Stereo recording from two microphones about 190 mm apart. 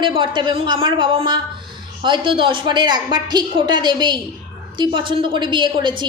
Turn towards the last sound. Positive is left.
turn(degrees=-25)  # may be behind; listen again after turning